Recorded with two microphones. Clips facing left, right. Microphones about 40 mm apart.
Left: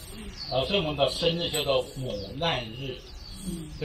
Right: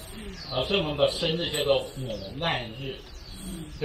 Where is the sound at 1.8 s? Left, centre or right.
Right.